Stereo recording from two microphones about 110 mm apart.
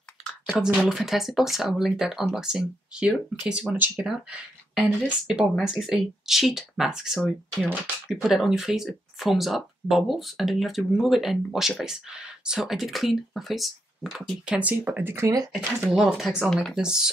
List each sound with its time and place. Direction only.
0.6 s speech: 5° right (ahead or behind); by 15.3 s 25° right (ahead or behind)
15.8 s speech: 5° right (ahead or behind)